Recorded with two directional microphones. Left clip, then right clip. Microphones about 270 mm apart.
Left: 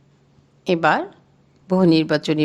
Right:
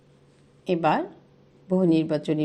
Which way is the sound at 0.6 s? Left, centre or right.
Left.